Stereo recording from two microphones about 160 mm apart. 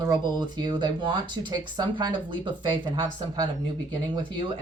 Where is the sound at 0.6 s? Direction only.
25° right (ahead or behind).